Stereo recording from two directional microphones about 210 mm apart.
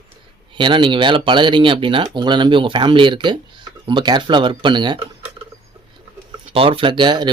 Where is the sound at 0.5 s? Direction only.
25° right (ahead or behind).